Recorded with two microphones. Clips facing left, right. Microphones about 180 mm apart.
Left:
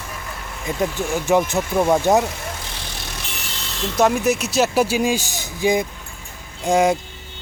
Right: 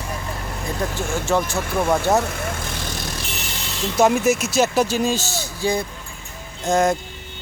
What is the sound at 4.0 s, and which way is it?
Speech, centre (ahead or behind).